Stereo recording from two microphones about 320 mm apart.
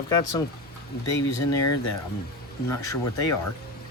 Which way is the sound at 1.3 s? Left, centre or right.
Left.